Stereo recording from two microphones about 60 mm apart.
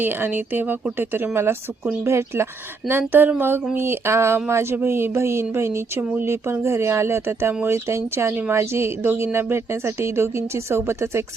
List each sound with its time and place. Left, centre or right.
0.0 s speech: right